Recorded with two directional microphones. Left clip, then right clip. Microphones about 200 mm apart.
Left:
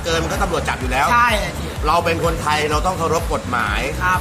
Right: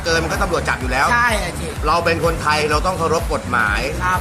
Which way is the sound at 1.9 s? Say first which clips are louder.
Right 1 dB; 10° left (ahead or behind).